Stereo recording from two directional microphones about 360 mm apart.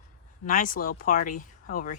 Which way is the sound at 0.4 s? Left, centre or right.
Left.